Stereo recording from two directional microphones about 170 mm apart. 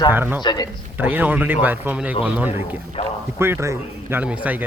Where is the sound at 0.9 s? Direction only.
10° right (ahead or behind).